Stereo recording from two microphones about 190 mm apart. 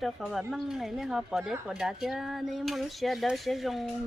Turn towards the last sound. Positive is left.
turn(degrees=0)  # may be behind; listen again after turning